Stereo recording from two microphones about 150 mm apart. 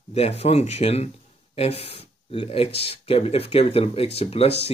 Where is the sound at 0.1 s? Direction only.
45° left (ahead or behind).